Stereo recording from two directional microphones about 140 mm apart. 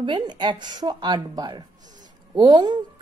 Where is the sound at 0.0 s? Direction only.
30° right (ahead or behind).